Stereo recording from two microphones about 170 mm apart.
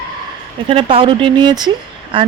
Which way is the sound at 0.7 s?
30° right (ahead or behind).